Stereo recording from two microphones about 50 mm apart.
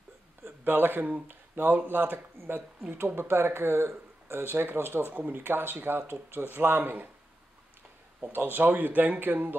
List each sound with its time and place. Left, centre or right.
0.4 s a sound: right
1.0 s speech: right
1.5 s speech: right
2.3 s speech: right
3.9 s speech: right
8.2 s speech: right